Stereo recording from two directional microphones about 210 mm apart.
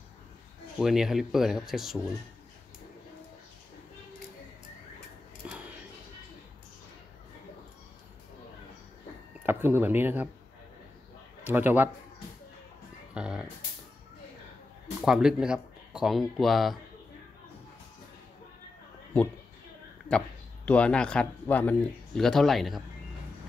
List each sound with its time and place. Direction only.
0.7 s speech: centre (ahead or behind)
9.4 s speech: 10° right (ahead or behind)
11.4 s a man's voice: 10° right (ahead or behind)
13.1 s a sound: 5° right (ahead or behind)
15.0 s speech: centre (ahead or behind)
20.1 s speech: 5° left (ahead or behind)